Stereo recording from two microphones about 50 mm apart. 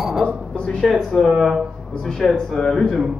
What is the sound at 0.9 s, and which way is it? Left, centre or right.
Speech, centre.